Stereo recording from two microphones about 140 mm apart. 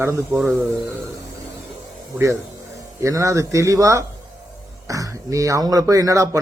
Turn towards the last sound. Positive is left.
turn(degrees=-25)  # may be behind; listen again after turning